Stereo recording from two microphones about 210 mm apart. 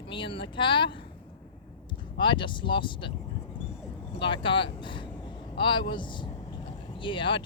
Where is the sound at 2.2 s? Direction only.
25° left (ahead or behind).